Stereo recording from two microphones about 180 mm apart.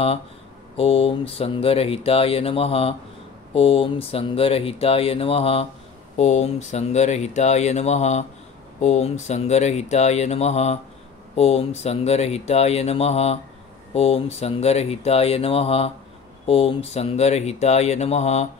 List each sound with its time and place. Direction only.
0.7 s speech: 35° left (ahead or behind)